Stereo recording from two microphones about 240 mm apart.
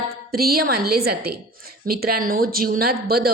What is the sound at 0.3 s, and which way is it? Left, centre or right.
A woman's voice, right.